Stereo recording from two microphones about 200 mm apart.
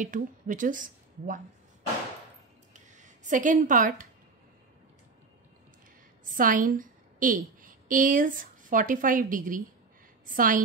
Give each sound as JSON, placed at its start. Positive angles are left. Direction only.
{"t": 0.0, "sound": "a woman's voice", "side_deg": -40}
{"t": 2.7, "sound": "a sound", "side_deg": -40}
{"t": 6.3, "sound": "a woman's voice", "side_deg": -45}